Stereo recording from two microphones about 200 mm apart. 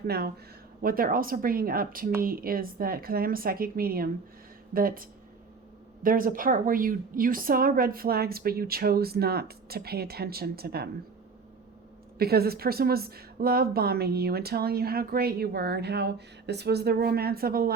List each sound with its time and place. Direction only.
0.8 s a woman's voice: 45° right (ahead or behind)
12.2 s a woman's voice: 50° right (ahead or behind)